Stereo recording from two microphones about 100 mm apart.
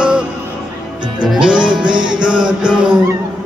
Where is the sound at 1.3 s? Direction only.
5° right (ahead or behind).